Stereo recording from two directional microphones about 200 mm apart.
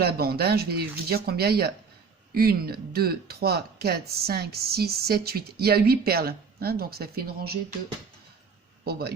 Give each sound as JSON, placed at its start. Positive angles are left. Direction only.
{"t": 0.0, "sound": "speech", "side_deg": -50}
{"t": 8.8, "sound": "speech", "side_deg": -50}